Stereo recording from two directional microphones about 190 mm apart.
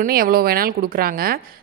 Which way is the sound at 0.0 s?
50° right (ahead or behind).